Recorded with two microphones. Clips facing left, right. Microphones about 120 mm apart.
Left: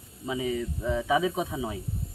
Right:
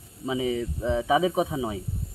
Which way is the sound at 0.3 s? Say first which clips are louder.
Right 3 dB; 15° right (ahead or behind).